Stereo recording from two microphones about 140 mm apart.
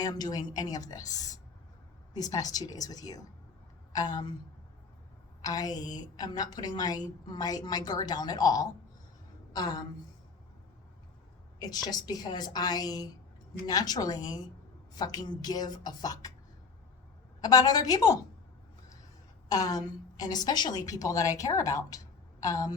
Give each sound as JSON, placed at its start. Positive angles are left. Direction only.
{"t": 0.0, "sound": "a woman's voice", "side_deg": 25}
{"t": 5.4, "sound": "a woman's voice", "side_deg": 25}
{"t": 11.6, "sound": "a woman's voice", "side_deg": 25}
{"t": 17.4, "sound": "a woman's voice", "side_deg": 25}
{"t": 19.5, "sound": "a woman's voice", "side_deg": 25}